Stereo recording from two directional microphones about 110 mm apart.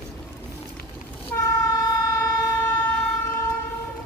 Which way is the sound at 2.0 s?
20° left (ahead or behind).